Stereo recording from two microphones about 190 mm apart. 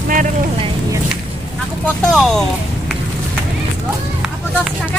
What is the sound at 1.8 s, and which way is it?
Speech, centre (ahead or behind).